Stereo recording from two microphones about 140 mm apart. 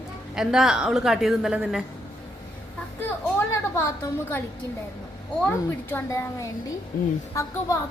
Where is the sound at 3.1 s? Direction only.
15° left (ahead or behind).